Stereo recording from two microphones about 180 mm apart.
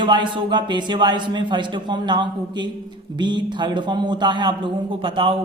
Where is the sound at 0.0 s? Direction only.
25° right (ahead or behind).